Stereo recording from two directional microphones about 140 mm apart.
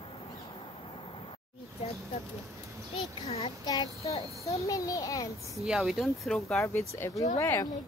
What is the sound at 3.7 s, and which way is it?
Child singing, 25° left (ahead or behind).